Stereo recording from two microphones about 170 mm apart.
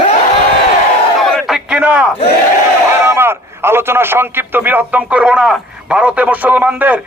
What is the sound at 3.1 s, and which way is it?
A man's voice, 15° right (ahead or behind).